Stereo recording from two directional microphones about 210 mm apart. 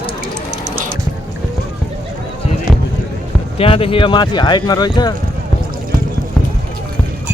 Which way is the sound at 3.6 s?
25° left (ahead or behind).